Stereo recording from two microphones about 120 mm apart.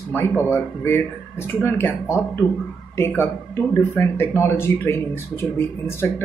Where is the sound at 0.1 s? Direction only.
20° left (ahead or behind).